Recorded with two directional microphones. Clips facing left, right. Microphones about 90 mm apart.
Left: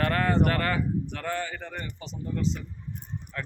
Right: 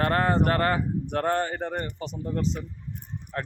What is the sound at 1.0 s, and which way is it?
A man's voice, 45° right (ahead or behind).